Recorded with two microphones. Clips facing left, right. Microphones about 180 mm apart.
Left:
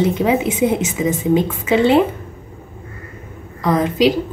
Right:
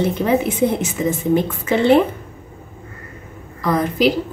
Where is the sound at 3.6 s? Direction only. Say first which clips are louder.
Left 2 dB; 20° left (ahead or behind).